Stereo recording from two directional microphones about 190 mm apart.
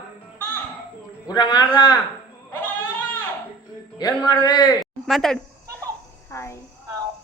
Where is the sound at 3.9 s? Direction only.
20° left (ahead or behind).